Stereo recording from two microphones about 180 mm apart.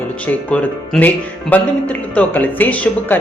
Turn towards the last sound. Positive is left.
turn(degrees=10)  # may be behind; listen again after turning